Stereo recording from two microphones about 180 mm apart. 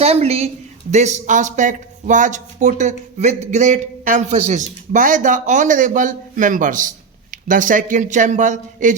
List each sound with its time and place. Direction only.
0.0 s a man's voice: 35° right (ahead or behind)